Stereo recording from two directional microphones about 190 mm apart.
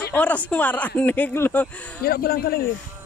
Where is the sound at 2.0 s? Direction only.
50° left (ahead or behind).